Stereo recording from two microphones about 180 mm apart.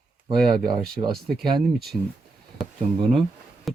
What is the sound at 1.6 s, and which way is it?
Speech, centre (ahead or behind).